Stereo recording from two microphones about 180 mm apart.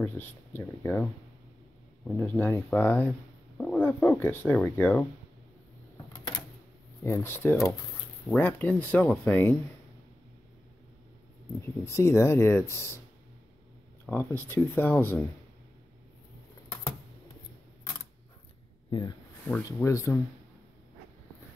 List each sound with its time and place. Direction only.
0.0 s speech: 10° left (ahead or behind)
2.1 s speech: 10° left (ahead or behind)
7.0 s speech: 15° left (ahead or behind)
11.6 s speech: 15° left (ahead or behind)
14.0 s speech: 10° left (ahead or behind)
18.9 s speech: 25° left (ahead or behind)